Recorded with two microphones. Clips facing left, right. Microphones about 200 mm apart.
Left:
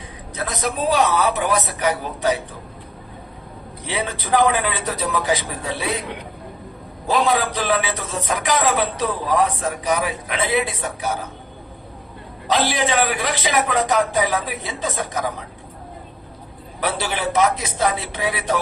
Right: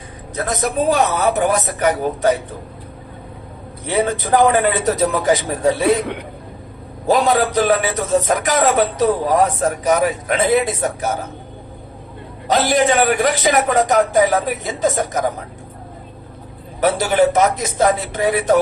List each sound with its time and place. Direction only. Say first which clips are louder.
0.3 s a man's voice: right 5 dB; 45° right (ahead or behind)
3.8 s a man's voice: right 7 dB; 50° right (ahead or behind)
7.1 s a man's voice: right 4 dB; 45° right (ahead or behind)
12.5 s a man's voice: right 5 dB; 45° right (ahead or behind)
16.8 s a man's voice: right 9 dB; 45° right (ahead or behind)